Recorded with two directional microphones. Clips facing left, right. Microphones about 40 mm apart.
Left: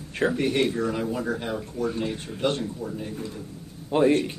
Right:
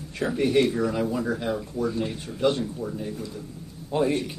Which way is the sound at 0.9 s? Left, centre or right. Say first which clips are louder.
Right 2 dB; centre.